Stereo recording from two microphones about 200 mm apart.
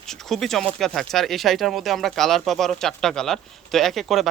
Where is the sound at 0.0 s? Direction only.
Centre (ahead or behind).